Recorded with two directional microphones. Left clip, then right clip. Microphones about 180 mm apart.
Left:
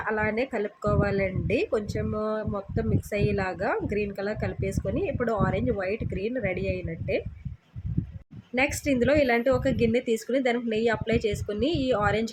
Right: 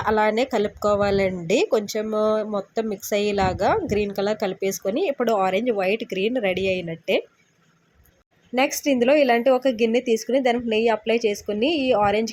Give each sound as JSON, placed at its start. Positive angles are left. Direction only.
{"t": 0.0, "sound": "speech", "side_deg": -20}
{"t": 8.5, "sound": "speech", "side_deg": -20}